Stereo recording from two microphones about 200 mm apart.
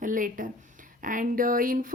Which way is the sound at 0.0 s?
40° right (ahead or behind).